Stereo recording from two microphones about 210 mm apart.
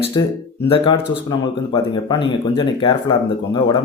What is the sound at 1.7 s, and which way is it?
Speech, 20° left (ahead or behind).